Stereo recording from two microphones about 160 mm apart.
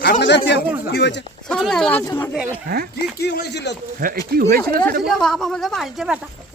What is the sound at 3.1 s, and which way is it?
Speech, 75° left (ahead or behind).